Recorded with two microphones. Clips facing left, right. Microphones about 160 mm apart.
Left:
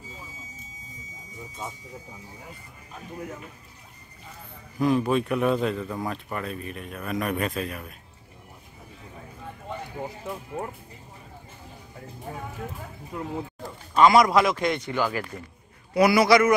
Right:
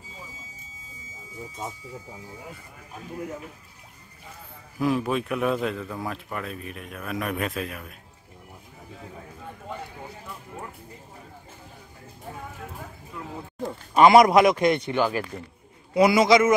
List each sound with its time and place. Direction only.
4.7 s speech: 5° right (ahead or behind)
13.9 s a man's voice: 20° right (ahead or behind)